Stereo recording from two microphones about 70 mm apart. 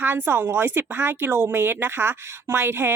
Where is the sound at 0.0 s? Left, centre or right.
Right.